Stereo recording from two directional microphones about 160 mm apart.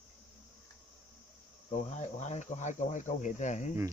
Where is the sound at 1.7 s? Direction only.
45° left (ahead or behind).